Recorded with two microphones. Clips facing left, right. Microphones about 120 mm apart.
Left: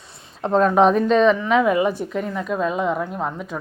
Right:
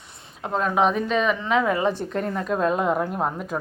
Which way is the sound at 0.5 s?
5° right (ahead or behind).